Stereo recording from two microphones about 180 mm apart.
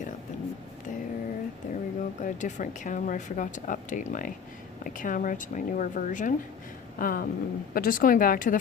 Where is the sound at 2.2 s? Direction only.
45° left (ahead or behind).